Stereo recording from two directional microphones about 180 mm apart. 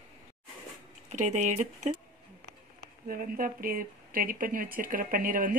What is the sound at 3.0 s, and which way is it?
A woman's voice, 50° right (ahead or behind).